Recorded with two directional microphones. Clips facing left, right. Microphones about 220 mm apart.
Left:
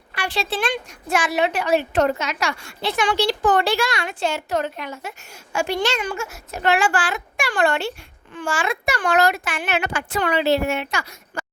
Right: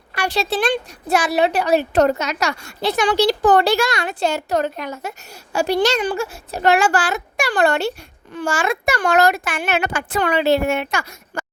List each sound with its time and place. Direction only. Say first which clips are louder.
0.1 s a woman's voice: right 4 dB; 40° right (ahead or behind)